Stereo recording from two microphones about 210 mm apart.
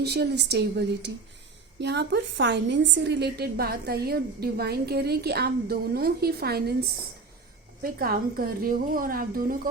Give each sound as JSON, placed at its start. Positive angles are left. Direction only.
{"t": 0.0, "sound": "a woman's voice", "side_deg": -50}
{"t": 7.8, "sound": "a woman's voice", "side_deg": -45}